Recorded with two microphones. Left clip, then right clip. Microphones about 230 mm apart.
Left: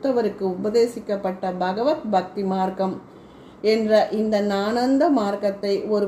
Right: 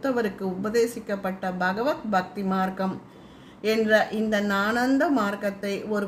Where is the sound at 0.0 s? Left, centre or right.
Right.